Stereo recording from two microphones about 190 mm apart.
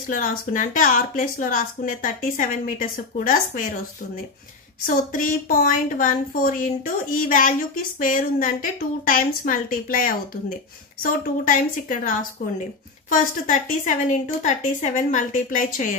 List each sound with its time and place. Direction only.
0.1 s speech: 45° left (ahead or behind)
4.8 s a woman's voice: 45° left (ahead or behind)